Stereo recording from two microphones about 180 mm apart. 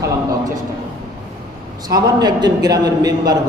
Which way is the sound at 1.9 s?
20° right (ahead or behind).